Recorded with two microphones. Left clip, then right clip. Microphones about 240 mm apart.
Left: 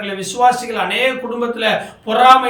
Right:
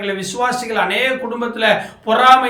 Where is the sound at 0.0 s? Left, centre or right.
Centre.